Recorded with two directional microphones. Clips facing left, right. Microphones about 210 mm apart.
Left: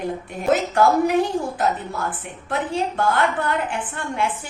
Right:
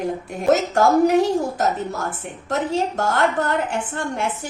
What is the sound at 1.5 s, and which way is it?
A woman's voice, 45° right (ahead or behind).